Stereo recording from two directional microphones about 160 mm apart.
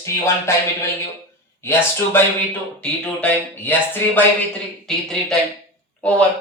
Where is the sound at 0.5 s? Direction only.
15° left (ahead or behind).